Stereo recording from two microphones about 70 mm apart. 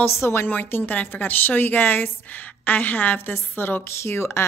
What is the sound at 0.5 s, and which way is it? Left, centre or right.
A woman's voice, left.